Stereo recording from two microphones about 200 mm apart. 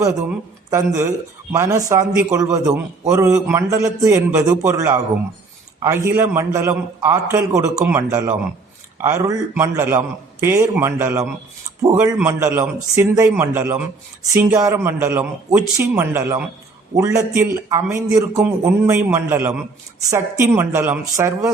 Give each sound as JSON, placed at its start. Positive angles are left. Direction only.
{"t": 0.3, "sound": "a man's voice", "side_deg": -15}